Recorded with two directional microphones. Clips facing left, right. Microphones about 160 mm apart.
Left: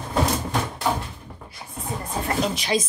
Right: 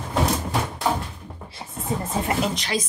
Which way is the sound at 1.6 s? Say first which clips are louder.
Right 4 dB; 25° right (ahead or behind).